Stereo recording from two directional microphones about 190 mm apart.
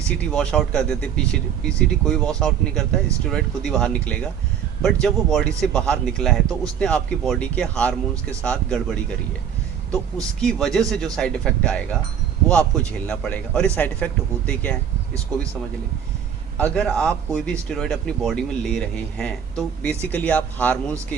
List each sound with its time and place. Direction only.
0.1 s speech: 5° left (ahead or behind)
8.1 s speech: 15° right (ahead or behind)
8.4 s speech: 5° left (ahead or behind)
10.4 s speech: 5° left (ahead or behind)
16.6 s speech: 5° left (ahead or behind)